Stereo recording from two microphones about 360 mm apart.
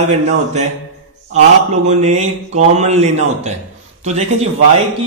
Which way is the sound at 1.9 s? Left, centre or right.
Centre.